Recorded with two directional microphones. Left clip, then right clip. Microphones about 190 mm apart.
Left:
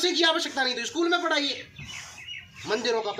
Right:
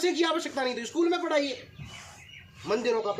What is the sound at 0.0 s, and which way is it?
Speech, 35° right (ahead or behind).